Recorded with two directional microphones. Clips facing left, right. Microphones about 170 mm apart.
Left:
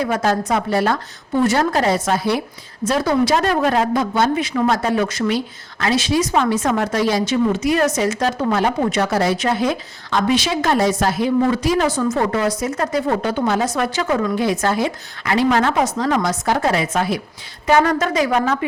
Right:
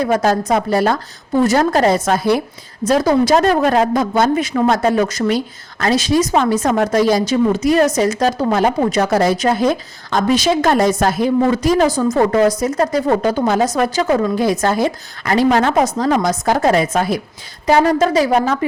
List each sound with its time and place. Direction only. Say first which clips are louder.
0.0 s a woman's voice: right 4 dB; 40° right (ahead or behind)
17.7 s a woman's voice: right 3 dB; 30° right (ahead or behind)